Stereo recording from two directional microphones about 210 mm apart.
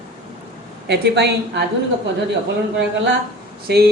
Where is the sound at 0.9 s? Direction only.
55° right (ahead or behind).